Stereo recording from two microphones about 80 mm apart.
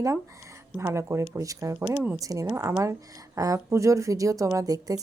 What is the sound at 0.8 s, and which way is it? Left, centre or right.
Speech, right.